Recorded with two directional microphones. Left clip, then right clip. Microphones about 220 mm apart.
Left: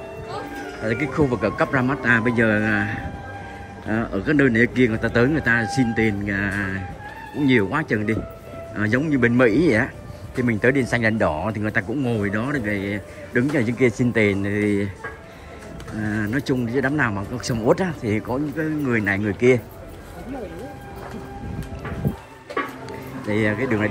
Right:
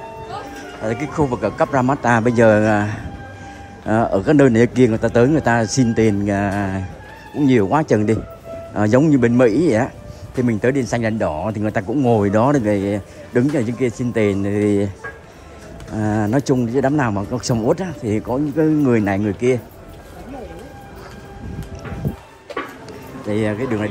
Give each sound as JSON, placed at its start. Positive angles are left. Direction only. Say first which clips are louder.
{"t": 0.8, "sound": "speech", "louder": "right 1 dB", "side_deg": -10}
{"t": 4.1, "sound": "speech", "louder": "right 4 dB", "side_deg": -20}
{"t": 16.2, "sound": "speech", "louder": "right 6 dB", "side_deg": -20}
{"t": 23.2, "sound": "speech", "louder": "right 1 dB", "side_deg": -15}